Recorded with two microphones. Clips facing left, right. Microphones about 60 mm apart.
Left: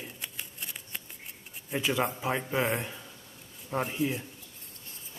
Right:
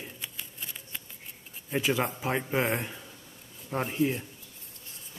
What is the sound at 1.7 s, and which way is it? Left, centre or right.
A man's voice, centre.